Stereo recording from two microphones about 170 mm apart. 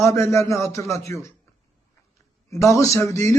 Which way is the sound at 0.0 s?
15° left (ahead or behind).